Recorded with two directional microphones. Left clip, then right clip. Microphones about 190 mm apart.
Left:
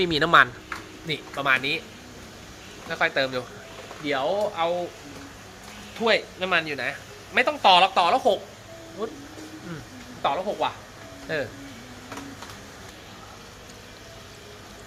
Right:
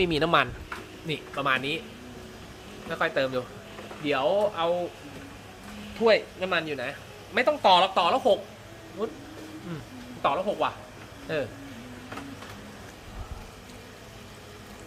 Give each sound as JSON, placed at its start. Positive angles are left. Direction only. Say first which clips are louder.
{"t": 0.0, "sound": "a woman's voice", "louder": "left 5 dB", "side_deg": 0}
{"t": 2.9, "sound": "speech", "louder": "left 2 dB", "side_deg": -5}
{"t": 6.1, "sound": "a woman's voice", "louder": "even", "side_deg": 5}
{"t": 10.2, "sound": "speech", "louder": "left 1 dB", "side_deg": -15}
{"t": 11.3, "sound": "a woman's voice", "louder": "left 2 dB", "side_deg": 0}